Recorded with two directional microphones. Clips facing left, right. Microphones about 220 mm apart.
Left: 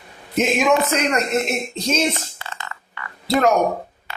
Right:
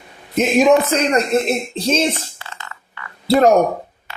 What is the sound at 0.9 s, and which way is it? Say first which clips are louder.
Speech: right 4 dB; 30° right (ahead or behind).